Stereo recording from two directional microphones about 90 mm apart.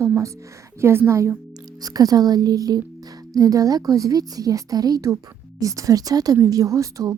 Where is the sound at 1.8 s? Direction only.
45° right (ahead or behind).